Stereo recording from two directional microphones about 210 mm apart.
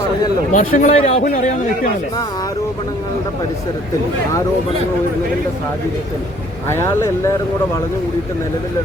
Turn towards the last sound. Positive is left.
turn(degrees=15)  # may be behind; listen again after turning